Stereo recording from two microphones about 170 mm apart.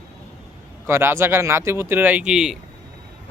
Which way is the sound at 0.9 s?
15° right (ahead or behind).